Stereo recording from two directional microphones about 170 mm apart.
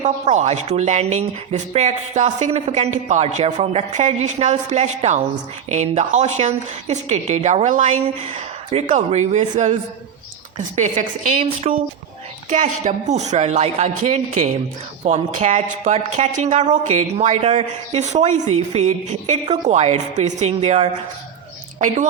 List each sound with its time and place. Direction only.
0.0 s a woman's voice: 45° right (ahead or behind)